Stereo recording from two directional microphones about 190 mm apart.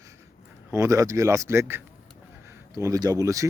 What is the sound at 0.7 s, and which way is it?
Speech, 15° right (ahead or behind).